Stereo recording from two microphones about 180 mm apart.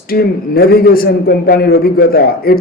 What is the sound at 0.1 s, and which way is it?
A man's voice, 55° left (ahead or behind).